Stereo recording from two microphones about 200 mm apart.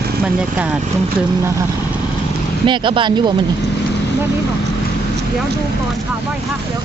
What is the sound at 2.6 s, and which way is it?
Speech, 25° right (ahead or behind).